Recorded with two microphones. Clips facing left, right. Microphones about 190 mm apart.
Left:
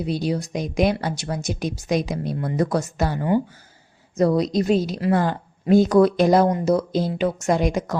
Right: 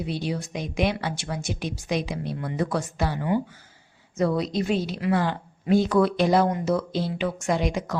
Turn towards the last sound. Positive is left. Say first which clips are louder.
# left 4 dB
turn(degrees=45)  # may be behind; listen again after turning